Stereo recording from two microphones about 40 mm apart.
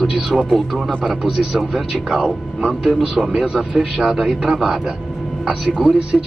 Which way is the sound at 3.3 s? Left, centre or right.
Centre.